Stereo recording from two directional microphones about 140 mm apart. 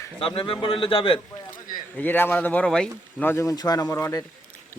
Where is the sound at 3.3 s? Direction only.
20° left (ahead or behind).